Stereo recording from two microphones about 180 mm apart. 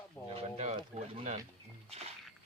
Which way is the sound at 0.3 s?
35° right (ahead or behind).